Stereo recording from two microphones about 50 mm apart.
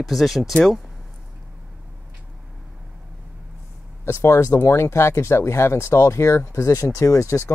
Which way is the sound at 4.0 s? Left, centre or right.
Left.